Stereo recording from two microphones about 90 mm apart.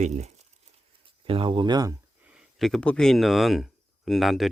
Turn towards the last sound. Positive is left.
turn(degrees=0)  # may be behind; listen again after turning